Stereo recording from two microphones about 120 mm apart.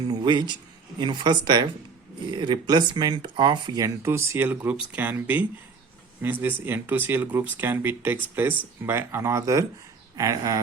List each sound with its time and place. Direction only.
0.1 s a sound: 40° right (ahead or behind)
0.9 s speech: 40° right (ahead or behind)
3.8 s speech: 25° right (ahead or behind)